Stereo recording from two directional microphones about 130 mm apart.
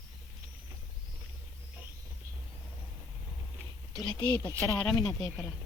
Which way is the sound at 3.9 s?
35° left (ahead or behind).